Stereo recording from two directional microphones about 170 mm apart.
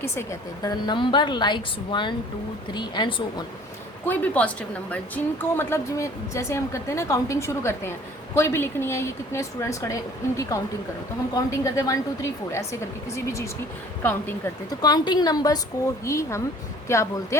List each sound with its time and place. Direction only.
0.0 s a woman's voice: 15° left (ahead or behind)
4.0 s a woman's voice: 10° left (ahead or behind)
13.1 s a woman's voice: 15° left (ahead or behind)
14.8 s a woman's voice: 25° left (ahead or behind)